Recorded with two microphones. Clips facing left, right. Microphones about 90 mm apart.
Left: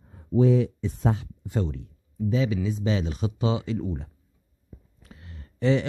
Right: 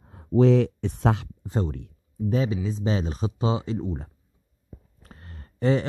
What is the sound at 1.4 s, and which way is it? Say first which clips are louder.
Speech: left 1 dB; 35° right (ahead or behind).